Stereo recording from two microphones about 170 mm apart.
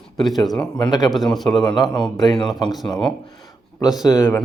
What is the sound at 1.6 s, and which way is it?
Speech, 25° left (ahead or behind).